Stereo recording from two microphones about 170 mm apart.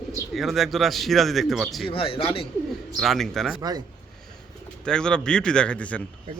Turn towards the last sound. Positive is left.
turn(degrees=10)  # may be behind; listen again after turning